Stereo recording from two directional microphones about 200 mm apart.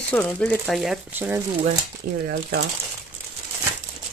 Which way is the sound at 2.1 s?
50° right (ahead or behind).